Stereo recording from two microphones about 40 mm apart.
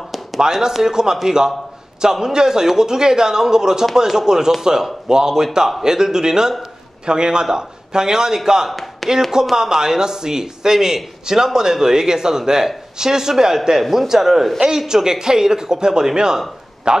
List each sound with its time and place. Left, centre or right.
0.4 s a man's voice: centre
8.6 s speech: centre
9.3 s speech: centre